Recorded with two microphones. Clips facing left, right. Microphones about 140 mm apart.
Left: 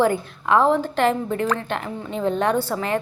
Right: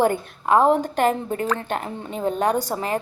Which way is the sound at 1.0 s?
40° right (ahead or behind).